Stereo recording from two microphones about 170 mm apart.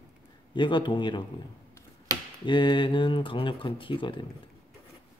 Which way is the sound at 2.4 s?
30° left (ahead or behind).